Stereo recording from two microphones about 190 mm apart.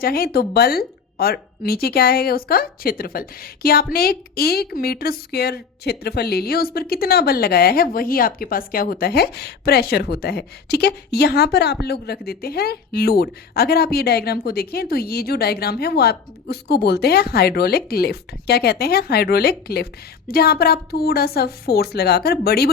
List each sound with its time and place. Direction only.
0.0 s a woman's voice: 50° left (ahead or behind)